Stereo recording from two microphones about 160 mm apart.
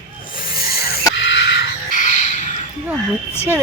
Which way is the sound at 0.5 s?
70° left (ahead or behind).